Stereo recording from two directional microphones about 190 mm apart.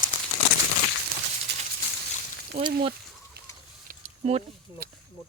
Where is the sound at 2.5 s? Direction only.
35° right (ahead or behind).